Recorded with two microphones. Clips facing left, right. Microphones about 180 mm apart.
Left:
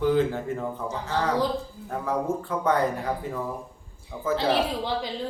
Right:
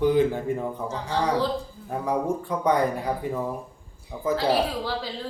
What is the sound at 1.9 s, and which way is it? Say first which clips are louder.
A man's voice: right 1 dB; 15° right (ahead or behind).